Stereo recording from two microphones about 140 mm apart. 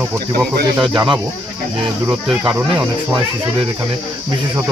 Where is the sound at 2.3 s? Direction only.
5° right (ahead or behind).